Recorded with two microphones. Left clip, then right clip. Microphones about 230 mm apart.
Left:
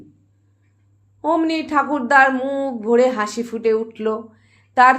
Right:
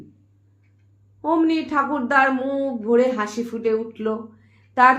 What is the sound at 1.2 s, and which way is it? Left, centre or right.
A woman's voice, left.